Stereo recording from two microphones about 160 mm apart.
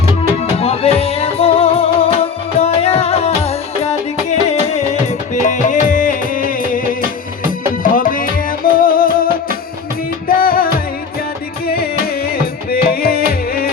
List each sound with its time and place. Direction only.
0.5 s music: 40° left (ahead or behind); by 6.8 s 60° left (ahead or behind)
7.9 s music: 60° left (ahead or behind)